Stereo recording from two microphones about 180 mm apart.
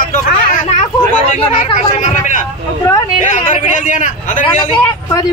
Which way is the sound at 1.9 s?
45° left (ahead or behind).